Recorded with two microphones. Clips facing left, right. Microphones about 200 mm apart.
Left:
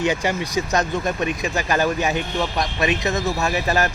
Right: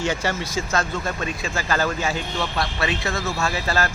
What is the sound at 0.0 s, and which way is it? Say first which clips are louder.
A man's voice: left 3 dB; 15° left (ahead or behind).